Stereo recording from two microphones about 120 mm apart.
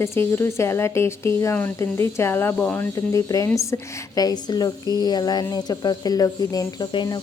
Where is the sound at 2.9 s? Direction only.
25° left (ahead or behind).